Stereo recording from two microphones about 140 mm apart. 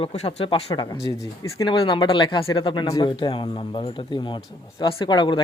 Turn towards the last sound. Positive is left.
turn(degrees=30)  # may be behind; listen again after turning